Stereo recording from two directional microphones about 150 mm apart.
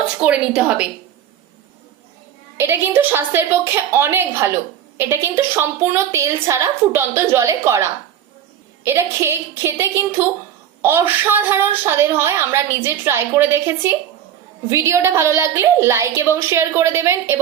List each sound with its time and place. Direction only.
0.2 s a woman's voice: 5° right (ahead or behind)
2.6 s a woman's voice: 15° right (ahead or behind)